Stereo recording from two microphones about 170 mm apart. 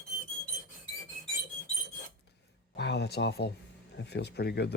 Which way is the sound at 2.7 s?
80° left.